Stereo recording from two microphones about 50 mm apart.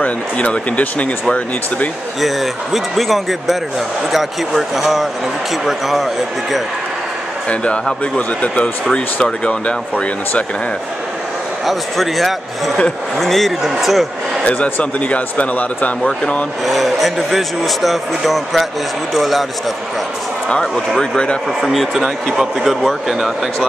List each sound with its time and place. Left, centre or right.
0.0 s speech: left
2.1 s speech: centre
7.4 s speech: left
11.6 s speech: centre
14.5 s speech: left
16.6 s speech: centre
20.4 s speech: centre
21.6 s speech: centre